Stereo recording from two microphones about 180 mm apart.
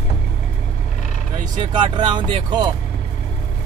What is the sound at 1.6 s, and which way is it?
Speech, 25° right (ahead or behind).